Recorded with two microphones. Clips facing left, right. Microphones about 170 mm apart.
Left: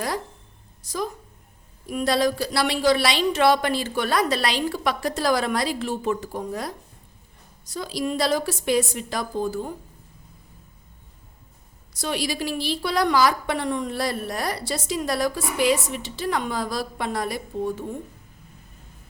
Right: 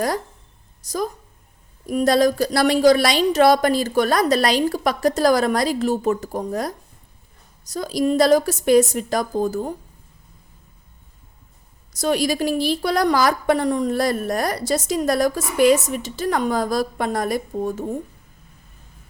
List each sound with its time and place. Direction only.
0.8 s a woman's voice: 40° right (ahead or behind)
11.9 s a woman's voice: 45° right (ahead or behind)